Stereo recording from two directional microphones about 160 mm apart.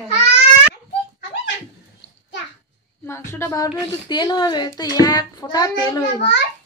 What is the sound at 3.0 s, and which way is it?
A woman's voice, 15° left (ahead or behind).